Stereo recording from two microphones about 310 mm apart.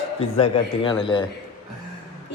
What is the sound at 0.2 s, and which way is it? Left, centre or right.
A man's voice, centre.